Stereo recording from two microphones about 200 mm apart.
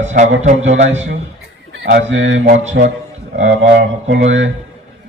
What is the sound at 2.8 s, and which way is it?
Mantra, 60° right (ahead or behind).